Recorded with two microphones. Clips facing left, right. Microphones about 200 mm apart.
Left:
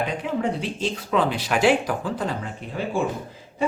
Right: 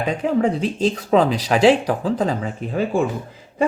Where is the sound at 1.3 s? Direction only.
90° right.